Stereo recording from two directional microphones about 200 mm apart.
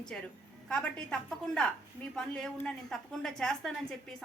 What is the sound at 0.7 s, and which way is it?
A woman's voice, 5° left (ahead or behind).